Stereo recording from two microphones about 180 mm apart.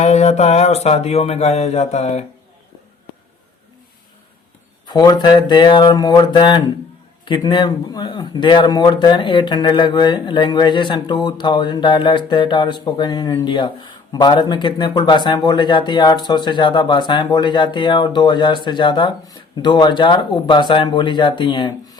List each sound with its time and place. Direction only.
0.0 s speech: 40° left (ahead or behind)
4.9 s speech: 25° left (ahead or behind)